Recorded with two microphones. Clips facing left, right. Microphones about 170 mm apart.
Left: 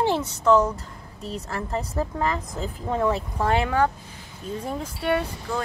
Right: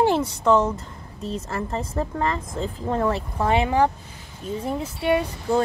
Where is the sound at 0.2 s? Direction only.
30° right (ahead or behind).